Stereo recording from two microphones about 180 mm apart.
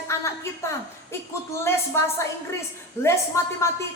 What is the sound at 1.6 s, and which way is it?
A woman's voice, 15° left (ahead or behind).